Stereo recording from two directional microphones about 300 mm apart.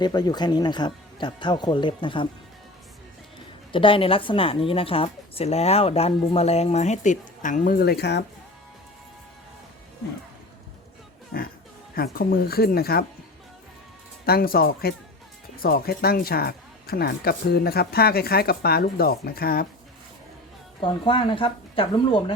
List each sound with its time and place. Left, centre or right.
0.0 s speech: centre
3.7 s a woman's voice: centre; by 8.2 s left
11.9 s a woman's voice: left
14.3 s a woman's voice: left
20.8 s speech: centre